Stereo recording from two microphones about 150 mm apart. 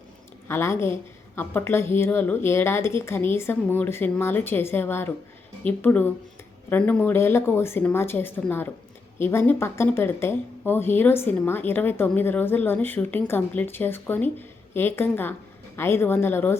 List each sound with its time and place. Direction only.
0.4 s speech: 15° left (ahead or behind)